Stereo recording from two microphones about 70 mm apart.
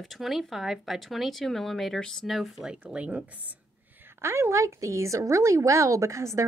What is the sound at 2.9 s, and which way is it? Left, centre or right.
Speech, centre.